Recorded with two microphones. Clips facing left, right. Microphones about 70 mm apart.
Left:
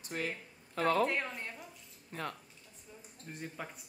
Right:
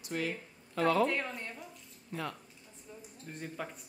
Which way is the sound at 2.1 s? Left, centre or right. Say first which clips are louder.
Right 2 dB; left.